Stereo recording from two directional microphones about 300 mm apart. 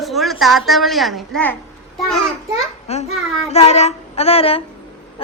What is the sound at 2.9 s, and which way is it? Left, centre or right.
A woman's voice, left.